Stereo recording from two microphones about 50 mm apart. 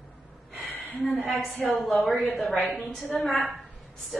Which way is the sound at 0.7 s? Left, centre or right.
Left.